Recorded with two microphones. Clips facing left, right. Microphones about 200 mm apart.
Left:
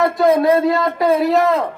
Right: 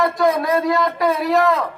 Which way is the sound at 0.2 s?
25° left (ahead or behind).